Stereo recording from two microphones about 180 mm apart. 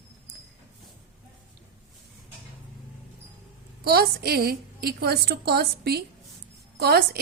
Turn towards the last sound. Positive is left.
turn(degrees=-65)  # may be behind; listen again after turning